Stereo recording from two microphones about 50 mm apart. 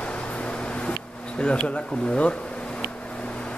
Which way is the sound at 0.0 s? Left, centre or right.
Left.